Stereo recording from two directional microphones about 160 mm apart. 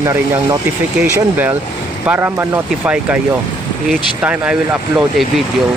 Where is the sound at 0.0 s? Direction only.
20° right (ahead or behind); by 5.2 s 5° right (ahead or behind).